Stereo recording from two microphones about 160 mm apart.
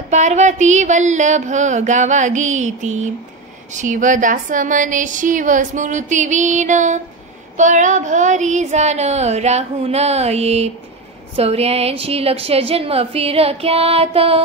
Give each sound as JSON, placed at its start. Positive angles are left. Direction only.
{"t": 0.1, "sound": "a woman's voice", "side_deg": -45}